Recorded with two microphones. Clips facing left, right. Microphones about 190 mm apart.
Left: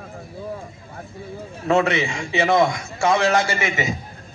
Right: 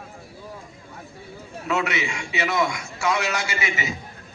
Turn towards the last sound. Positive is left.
turn(degrees=45)  # may be behind; listen again after turning